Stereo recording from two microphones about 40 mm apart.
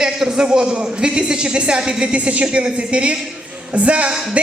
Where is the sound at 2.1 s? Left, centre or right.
Right.